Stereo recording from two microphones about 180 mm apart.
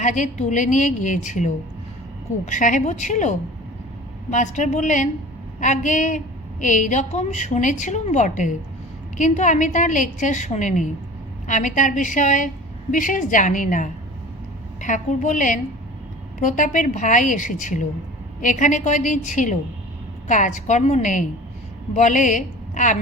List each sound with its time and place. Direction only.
0.0 s a woman's voice: 45° left (ahead or behind)
2.5 s a woman's voice: 45° left (ahead or behind)